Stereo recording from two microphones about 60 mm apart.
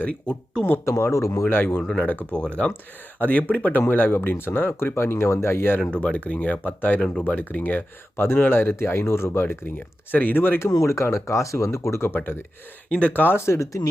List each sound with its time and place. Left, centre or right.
0.0 s speech: left
0.9 s speech: left
1.5 s speech: left
1.9 s speech: left
5.9 s speech: left
8.2 s speech: left
10.7 s speech: left
12.9 s speech: left
13.4 s speech: left